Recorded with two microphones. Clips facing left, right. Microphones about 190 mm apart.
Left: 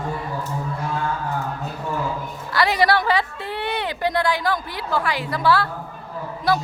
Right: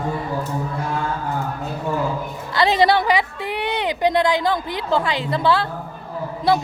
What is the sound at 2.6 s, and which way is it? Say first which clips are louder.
A woman's voice: right 3 dB; 25° right (ahead or behind).